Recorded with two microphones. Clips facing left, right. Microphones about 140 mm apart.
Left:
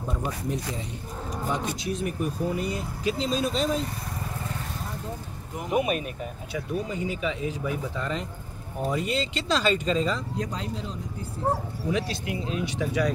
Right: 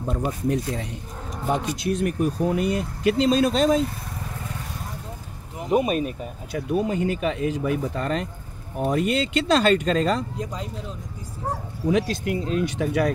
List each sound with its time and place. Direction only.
0.1 s speech: 70° right (ahead or behind); by 3.7 s 90° right
5.7 s speech: 35° right (ahead or behind)
6.8 s speech: 60° right (ahead or behind)
10.3 s speech: 5° right (ahead or behind)
11.9 s speech: 50° right (ahead or behind)